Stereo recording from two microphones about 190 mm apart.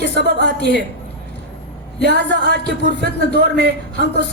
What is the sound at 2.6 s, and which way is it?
Speech, 65° left (ahead or behind).